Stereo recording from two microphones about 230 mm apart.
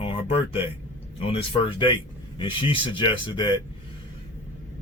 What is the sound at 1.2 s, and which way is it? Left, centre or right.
A man's voice, left.